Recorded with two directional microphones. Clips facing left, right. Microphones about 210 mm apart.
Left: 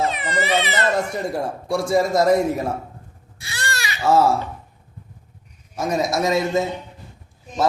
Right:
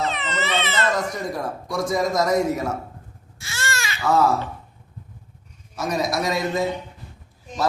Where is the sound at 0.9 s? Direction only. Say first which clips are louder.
Left 3 dB; 30° left (ahead or behind).